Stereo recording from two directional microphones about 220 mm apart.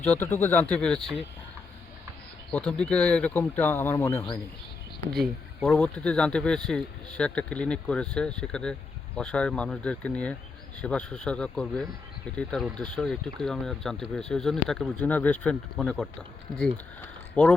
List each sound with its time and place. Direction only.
0.0 s speech: 10° left (ahead or behind)
2.5 s speech: 5° left (ahead or behind)
5.1 s speech: centre (ahead or behind)